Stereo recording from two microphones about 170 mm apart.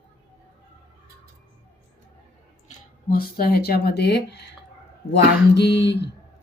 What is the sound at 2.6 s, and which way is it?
Speech, 55° left (ahead or behind).